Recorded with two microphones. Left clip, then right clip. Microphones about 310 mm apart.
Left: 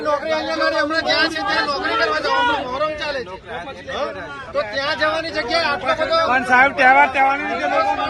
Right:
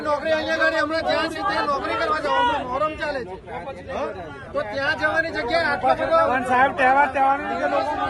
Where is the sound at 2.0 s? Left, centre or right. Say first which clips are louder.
Left 4 dB; left.